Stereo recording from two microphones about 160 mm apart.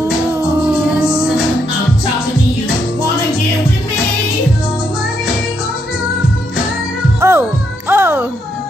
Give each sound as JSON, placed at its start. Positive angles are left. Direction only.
{"t": 7.2, "sound": "music", "side_deg": -15}